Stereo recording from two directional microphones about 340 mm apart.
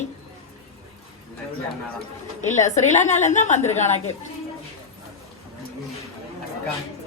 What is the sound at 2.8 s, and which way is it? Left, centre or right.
A woman's voice, left.